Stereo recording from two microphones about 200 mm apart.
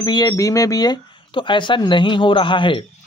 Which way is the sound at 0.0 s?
20° left (ahead or behind).